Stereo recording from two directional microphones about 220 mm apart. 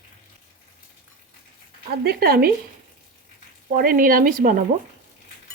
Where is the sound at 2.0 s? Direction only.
45° right (ahead or behind).